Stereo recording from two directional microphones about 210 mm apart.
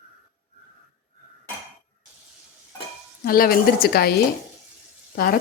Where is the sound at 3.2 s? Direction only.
45° left (ahead or behind).